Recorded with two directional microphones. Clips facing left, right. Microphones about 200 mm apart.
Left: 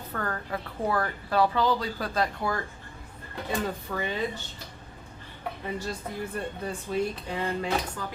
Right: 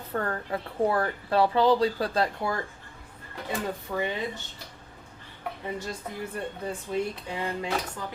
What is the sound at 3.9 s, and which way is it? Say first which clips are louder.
Speech: right 2 dB; 15° right (ahead or behind).